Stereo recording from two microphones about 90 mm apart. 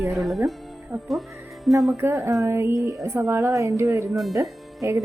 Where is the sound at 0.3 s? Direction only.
Centre (ahead or behind).